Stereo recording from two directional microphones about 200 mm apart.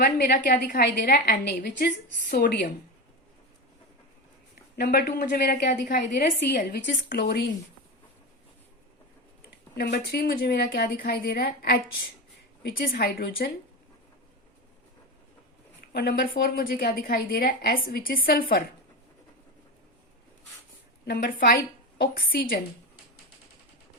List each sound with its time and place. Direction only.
0.0 s a woman's voice: 50° left (ahead or behind)
4.8 s a woman's voice: 50° left (ahead or behind)
9.7 s a woman's voice: 55° left (ahead or behind)
15.9 s a woman's voice: 55° left (ahead or behind)
21.1 s a woman's voice: 45° left (ahead or behind)